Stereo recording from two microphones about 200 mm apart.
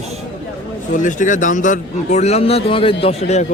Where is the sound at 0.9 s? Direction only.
40° left (ahead or behind).